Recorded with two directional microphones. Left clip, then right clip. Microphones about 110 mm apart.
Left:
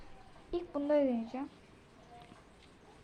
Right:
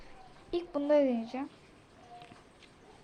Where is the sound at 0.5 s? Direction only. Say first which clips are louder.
Right 4 dB; 25° right (ahead or behind).